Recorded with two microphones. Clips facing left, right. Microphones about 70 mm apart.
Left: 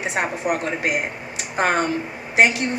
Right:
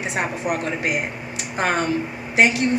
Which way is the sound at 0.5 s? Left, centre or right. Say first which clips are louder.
Left 1 dB; left.